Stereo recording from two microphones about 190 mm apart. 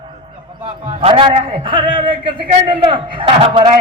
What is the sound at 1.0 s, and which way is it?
A man's voice, 30° right (ahead or behind).